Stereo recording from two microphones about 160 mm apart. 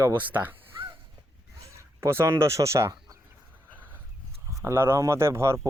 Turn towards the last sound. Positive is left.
turn(degrees=-15)  # may be behind; listen again after turning